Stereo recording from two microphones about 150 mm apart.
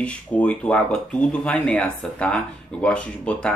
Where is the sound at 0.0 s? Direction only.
5° left (ahead or behind).